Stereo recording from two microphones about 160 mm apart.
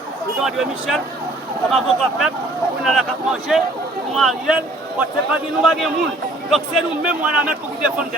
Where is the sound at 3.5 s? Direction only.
5° right (ahead or behind).